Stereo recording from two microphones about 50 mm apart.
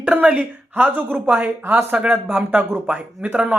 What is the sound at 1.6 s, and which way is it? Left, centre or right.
Speech, right.